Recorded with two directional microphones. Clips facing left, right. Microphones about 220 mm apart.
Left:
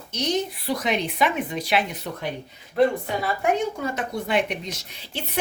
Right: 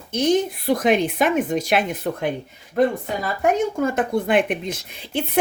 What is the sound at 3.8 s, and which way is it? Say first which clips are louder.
Speech: right 7 dB; 50° right (ahead or behind).